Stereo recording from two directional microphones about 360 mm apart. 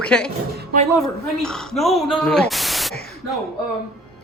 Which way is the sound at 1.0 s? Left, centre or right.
Centre.